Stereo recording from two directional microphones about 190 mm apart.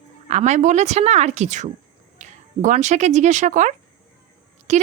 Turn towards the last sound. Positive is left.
turn(degrees=-40)  # may be behind; listen again after turning